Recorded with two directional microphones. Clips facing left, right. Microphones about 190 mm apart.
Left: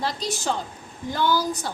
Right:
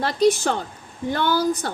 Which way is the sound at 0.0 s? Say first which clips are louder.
Right 9 dB; 60° right (ahead or behind).